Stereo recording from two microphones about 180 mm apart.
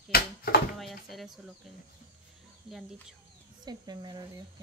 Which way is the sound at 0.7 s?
Centre (ahead or behind).